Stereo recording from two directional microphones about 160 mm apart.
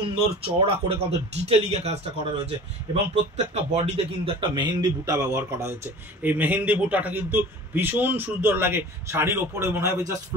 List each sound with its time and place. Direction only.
0.0 s a man's voice: 35° right (ahead or behind); by 10.1 s 15° right (ahead or behind)